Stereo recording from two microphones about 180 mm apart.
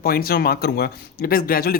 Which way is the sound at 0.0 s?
55° left (ahead or behind).